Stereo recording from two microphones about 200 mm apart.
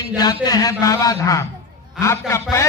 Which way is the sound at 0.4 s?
15° left (ahead or behind).